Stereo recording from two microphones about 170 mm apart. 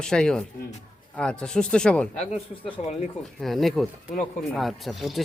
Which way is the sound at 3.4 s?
Centre (ahead or behind).